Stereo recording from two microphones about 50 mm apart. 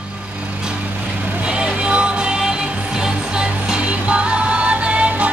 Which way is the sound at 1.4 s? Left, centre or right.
Centre.